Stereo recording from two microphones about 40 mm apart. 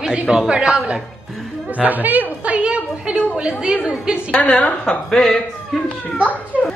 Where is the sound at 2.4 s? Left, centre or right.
Right.